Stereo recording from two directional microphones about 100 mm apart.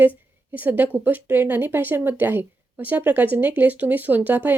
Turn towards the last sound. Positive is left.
turn(degrees=-20)  # may be behind; listen again after turning